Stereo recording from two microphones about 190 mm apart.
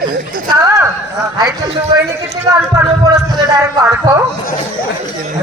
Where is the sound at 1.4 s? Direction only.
20° right (ahead or behind).